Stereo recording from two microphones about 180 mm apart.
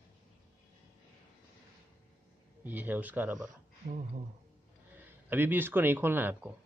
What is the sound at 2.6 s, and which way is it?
Speech, 10° right (ahead or behind).